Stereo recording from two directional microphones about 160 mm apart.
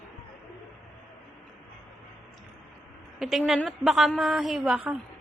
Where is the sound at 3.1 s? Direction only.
Centre (ahead or behind).